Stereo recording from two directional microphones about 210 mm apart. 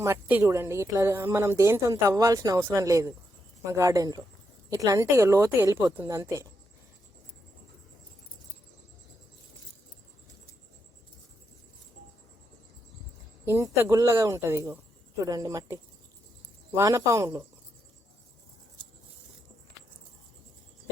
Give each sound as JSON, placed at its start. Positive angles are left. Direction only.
{"t": 0.0, "sound": "speech", "side_deg": -10}
{"t": 13.4, "sound": "speech", "side_deg": -10}